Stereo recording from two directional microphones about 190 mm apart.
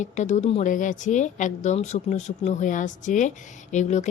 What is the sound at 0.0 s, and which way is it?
A woman's voice, 40° left (ahead or behind).